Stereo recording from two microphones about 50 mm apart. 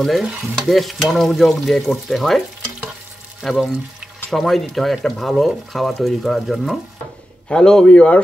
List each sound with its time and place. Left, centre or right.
0.0 s speech: centre
3.4 s speech: centre
7.4 s a man's voice: centre